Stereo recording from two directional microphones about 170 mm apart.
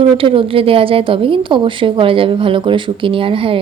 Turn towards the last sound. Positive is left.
turn(degrees=-30)  # may be behind; listen again after turning